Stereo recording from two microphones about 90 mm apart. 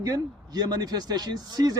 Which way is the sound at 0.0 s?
45° right (ahead or behind).